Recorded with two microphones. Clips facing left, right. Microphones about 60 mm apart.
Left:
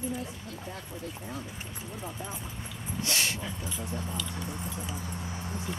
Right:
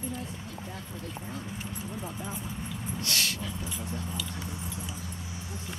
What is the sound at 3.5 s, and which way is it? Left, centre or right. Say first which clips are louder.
Speech: even; centre.